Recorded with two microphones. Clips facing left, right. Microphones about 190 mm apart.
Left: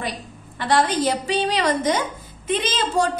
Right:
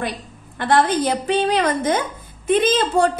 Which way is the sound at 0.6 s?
50° right (ahead or behind).